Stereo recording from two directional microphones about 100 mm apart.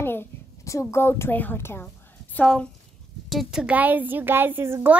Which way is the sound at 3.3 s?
5° right (ahead or behind).